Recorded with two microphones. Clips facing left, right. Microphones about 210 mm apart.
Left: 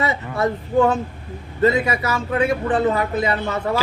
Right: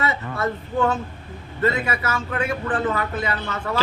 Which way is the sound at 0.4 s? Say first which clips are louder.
Left 5 dB; 35° left (ahead or behind).